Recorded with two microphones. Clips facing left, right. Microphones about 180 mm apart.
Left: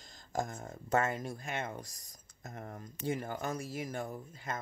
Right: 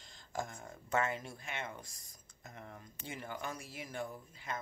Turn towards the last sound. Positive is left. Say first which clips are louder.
# left 3 dB
turn(degrees=45)  # may be behind; listen again after turning